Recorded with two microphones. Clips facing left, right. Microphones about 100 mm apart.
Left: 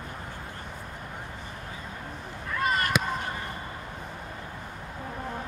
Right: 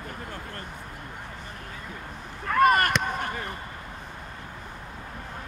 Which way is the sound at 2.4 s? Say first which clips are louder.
Right 8 dB; 60° right (ahead or behind).